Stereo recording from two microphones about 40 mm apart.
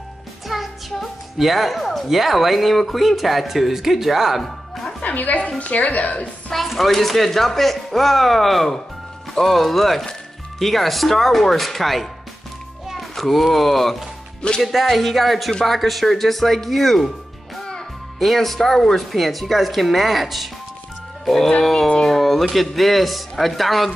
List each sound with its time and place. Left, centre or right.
0.5 s music: centre
2.0 s speech: centre
4.4 s music: centre
5.0 s a woman's voice: left
6.5 s a child's voice: centre
18.2 s speech: centre
21.6 s speech: centre